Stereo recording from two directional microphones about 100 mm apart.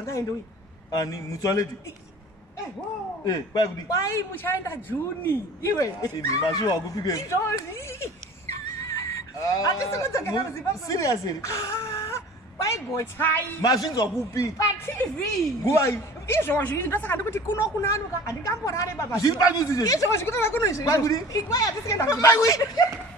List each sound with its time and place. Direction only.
0.9 s speech: 35° left (ahead or behind)
3.3 s speech: 40° left (ahead or behind)